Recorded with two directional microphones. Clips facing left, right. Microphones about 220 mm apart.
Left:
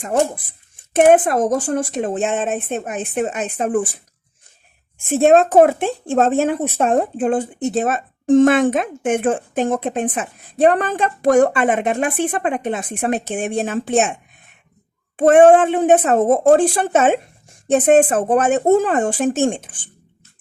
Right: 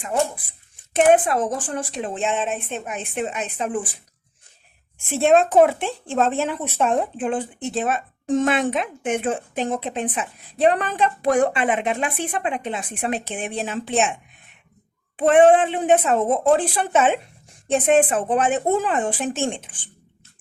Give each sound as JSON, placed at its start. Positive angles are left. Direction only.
{"t": 0.9, "sound": "speech", "side_deg": 50}
{"t": 5.0, "sound": "speech", "side_deg": 45}